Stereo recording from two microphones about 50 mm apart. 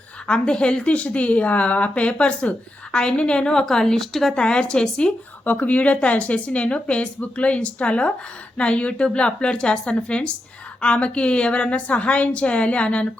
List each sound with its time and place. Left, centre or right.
0.3 s a woman's voice: centre
4.4 s a woman's voice: centre
5.5 s a woman's voice: left